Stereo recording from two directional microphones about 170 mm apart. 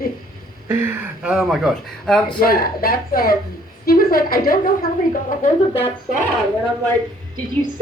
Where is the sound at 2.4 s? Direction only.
60° left (ahead or behind).